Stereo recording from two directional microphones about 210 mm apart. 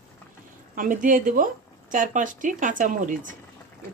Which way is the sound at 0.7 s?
40° right (ahead or behind).